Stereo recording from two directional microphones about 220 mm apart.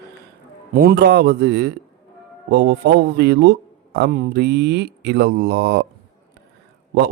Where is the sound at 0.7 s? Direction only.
45° right (ahead or behind).